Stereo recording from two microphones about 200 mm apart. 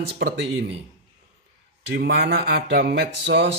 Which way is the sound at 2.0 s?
55° right (ahead or behind).